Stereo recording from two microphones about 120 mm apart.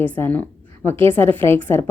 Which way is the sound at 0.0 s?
15° left (ahead or behind).